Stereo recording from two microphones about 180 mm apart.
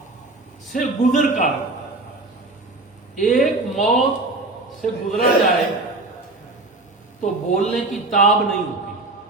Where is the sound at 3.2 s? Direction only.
45° left (ahead or behind).